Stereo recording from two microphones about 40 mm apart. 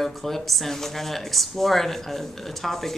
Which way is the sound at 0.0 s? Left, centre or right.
Centre.